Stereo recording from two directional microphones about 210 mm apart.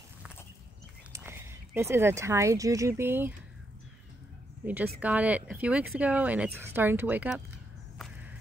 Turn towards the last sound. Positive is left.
turn(degrees=-10)  # may be behind; listen again after turning